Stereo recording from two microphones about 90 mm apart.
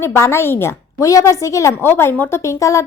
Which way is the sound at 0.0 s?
30° left (ahead or behind).